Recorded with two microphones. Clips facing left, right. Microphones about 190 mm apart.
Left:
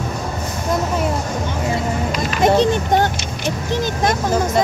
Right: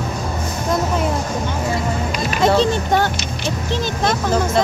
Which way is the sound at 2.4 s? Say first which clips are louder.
Left 1 dB; 15° left (ahead or behind).